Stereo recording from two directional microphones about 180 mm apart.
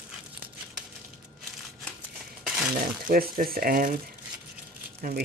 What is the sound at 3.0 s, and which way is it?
Speech, 55° right (ahead or behind).